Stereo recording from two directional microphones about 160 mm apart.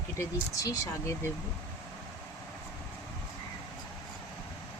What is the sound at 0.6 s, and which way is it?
Speech, 20° left (ahead or behind).